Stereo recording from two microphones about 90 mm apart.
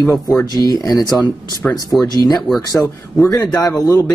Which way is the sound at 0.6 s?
40° left (ahead or behind).